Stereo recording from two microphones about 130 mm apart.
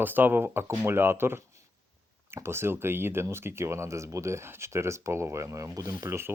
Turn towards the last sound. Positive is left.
turn(degrees=-20)  # may be behind; listen again after turning